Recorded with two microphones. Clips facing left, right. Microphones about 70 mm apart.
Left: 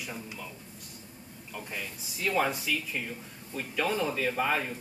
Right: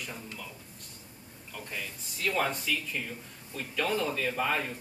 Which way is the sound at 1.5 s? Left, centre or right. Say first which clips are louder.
Left 1 dB; centre.